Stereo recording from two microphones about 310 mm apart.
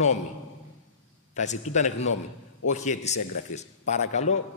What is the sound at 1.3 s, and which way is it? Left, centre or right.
A man's voice, left.